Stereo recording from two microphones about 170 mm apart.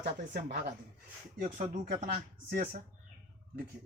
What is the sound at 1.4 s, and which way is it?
Speech, 50° right (ahead or behind).